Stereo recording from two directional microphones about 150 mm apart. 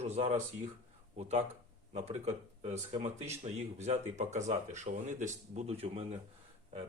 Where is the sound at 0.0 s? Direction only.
45° right (ahead or behind).